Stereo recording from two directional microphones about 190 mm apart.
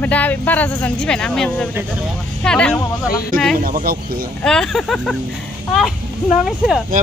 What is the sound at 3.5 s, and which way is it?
Speech, 45° right (ahead or behind).